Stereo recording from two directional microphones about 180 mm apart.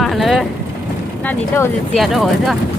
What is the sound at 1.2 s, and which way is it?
Speech, 15° left (ahead or behind).